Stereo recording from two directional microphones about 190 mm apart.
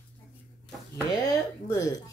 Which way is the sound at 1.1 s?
20° left (ahead or behind).